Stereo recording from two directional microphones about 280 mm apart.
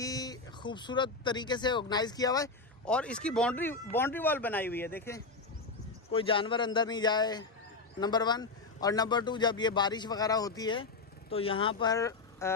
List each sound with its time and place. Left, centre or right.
0.0 s speech: centre
6.1 s speech: centre